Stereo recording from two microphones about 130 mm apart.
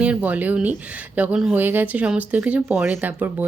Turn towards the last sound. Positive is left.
turn(degrees=-15)  # may be behind; listen again after turning